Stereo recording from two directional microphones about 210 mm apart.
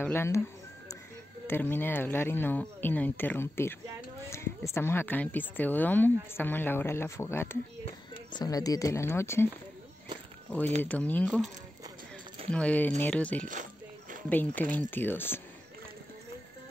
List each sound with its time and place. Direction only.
0.0 s a sound: 10° left (ahead or behind)
1.5 s a woman's voice: 10° left (ahead or behind)
4.7 s a woman's voice: 10° left (ahead or behind)
7.8 s speech: 25° left (ahead or behind)
10.8 s a woman's voice: 5° left (ahead or behind)
12.4 s a woman's voice: 5° left (ahead or behind)